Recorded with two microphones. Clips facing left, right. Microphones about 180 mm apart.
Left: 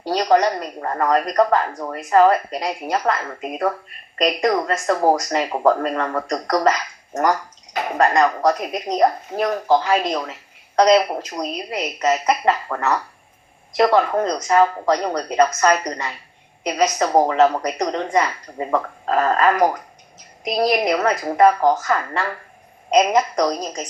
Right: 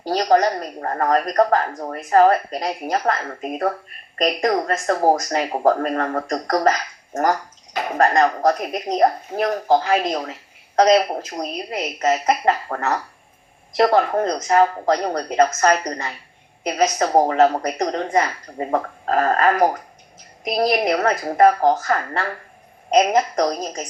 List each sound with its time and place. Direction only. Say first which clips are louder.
0.3 s speech: even; 35° right (ahead or behind)
7.9 s a woman's voice: even; 50° right (ahead or behind)
20.8 s a woman's voice: even; 45° right (ahead or behind)